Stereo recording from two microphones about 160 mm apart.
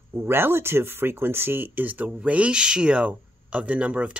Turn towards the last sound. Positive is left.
turn(degrees=-10)  # may be behind; listen again after turning